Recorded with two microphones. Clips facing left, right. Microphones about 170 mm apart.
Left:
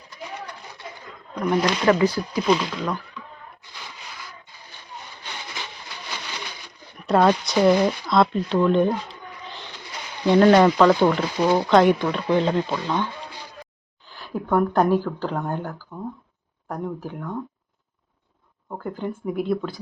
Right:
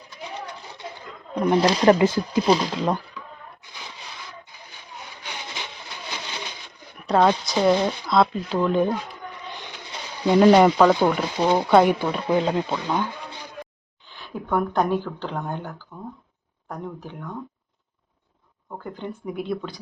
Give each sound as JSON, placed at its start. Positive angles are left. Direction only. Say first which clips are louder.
{"t": 1.4, "sound": "speech", "louder": "right 3 dB", "side_deg": -30}
{"t": 2.6, "sound": "speech", "louder": "right 3 dB", "side_deg": -35}
{"t": 7.1, "sound": "speech", "louder": "left 1 dB", "side_deg": 0}
{"t": 9.5, "sound": "a sound", "louder": "right 2 dB", "side_deg": -15}
{"t": 10.2, "sound": "speech", "louder": "even", "side_deg": -10}
{"t": 11.3, "sound": "speech", "louder": "even", "side_deg": -20}
{"t": 11.7, "sound": "speech", "louder": "even", "side_deg": -10}
{"t": 14.5, "sound": "speech", "louder": "left 3 dB", "side_deg": 5}
{"t": 15.9, "sound": "speech", "louder": "left 4 dB", "side_deg": 20}
{"t": 16.6, "sound": "speech", "louder": "left 4 dB", "side_deg": 10}
{"t": 18.9, "sound": "speech", "louder": "left 4 dB", "side_deg": 5}